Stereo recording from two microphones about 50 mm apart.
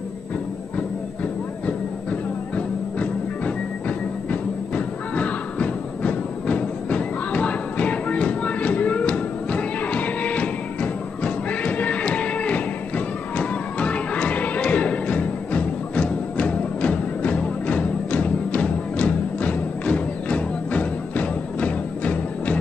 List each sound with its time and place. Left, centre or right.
2.5 s music: left